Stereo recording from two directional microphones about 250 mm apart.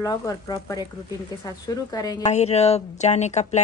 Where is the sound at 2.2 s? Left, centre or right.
Left.